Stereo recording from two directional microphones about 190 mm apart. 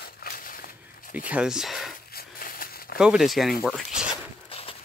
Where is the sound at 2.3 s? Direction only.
50° left (ahead or behind).